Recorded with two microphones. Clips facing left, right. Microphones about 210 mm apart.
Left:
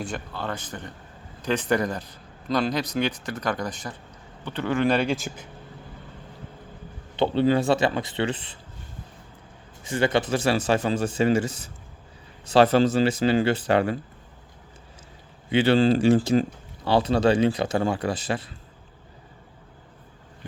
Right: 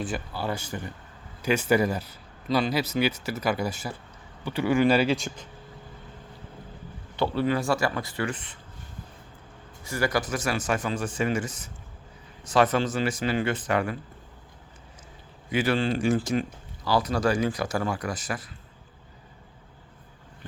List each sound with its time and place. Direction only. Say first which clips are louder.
0.0 s speech: right 1 dB; 5° right (ahead or behind)
7.2 s speech: left 4 dB; 25° left (ahead or behind)
9.8 s speech: left 4 dB; 20° left (ahead or behind)
15.4 s speech: left 6 dB; 30° left (ahead or behind)